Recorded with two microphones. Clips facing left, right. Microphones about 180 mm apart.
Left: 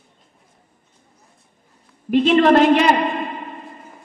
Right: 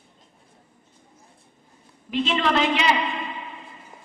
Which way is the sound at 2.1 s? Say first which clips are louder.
Left 10 dB; 50° left (ahead or behind).